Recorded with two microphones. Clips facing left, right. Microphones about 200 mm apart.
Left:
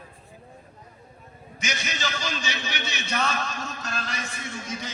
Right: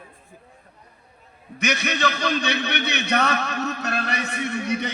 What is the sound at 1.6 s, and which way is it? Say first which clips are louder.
A man's voice: right 8 dB; 60° right (ahead or behind).